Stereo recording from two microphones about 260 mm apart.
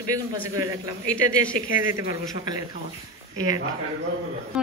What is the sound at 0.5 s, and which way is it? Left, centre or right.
Speech, right.